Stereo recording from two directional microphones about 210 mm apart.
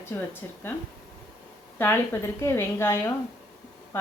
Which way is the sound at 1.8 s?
10° left (ahead or behind).